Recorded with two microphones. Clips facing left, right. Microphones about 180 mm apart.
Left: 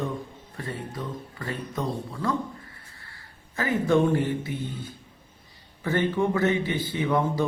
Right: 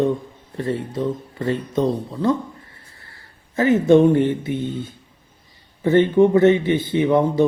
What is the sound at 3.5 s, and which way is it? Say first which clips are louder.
Speech: right 9 dB; 20° right (ahead or behind).